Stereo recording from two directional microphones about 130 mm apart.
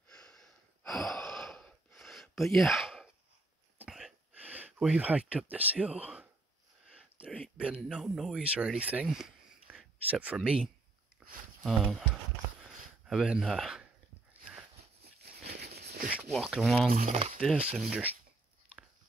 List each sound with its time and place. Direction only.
0.1 s gasp: 5° left (ahead or behind)
3.9 s a sound: 5° right (ahead or behind)
6.9 s speech: 5° right (ahead or behind)
11.6 s speech: 5° left (ahead or behind)
13.0 s speech: 5° right (ahead or behind)
16.3 s speech: centre (ahead or behind)
16.9 s speech: 65° right (ahead or behind)
17.6 s speech: 5° right (ahead or behind)